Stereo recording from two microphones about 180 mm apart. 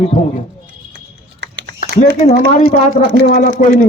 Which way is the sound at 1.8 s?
50° left (ahead or behind).